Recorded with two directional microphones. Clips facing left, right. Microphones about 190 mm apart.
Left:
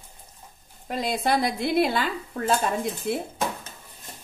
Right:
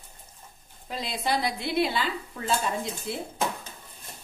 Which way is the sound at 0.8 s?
50° left (ahead or behind).